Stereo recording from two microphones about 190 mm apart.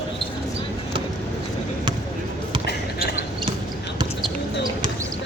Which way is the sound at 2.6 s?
55° left (ahead or behind).